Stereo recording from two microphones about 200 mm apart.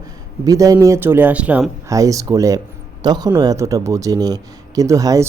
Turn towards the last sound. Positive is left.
turn(degrees=-15)  # may be behind; listen again after turning